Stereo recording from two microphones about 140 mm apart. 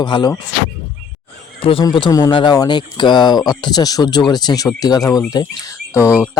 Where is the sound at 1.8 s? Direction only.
30° left (ahead or behind).